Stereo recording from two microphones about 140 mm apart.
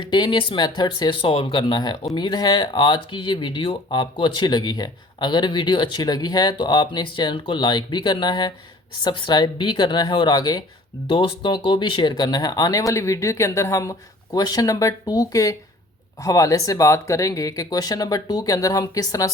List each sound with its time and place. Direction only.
0.0 s speech: 35° left (ahead or behind)